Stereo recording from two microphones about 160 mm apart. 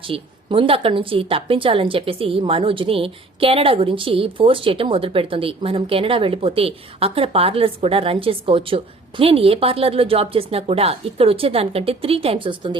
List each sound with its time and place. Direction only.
0.0 s a woman's voice: 35° right (ahead or behind)